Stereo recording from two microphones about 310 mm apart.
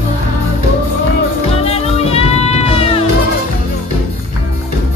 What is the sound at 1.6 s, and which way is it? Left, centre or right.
Music, centre.